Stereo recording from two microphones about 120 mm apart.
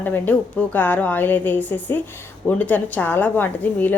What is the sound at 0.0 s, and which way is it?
A woman's voice, 15° left (ahead or behind).